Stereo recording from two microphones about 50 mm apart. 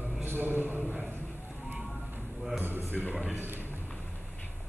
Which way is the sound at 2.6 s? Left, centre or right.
Right.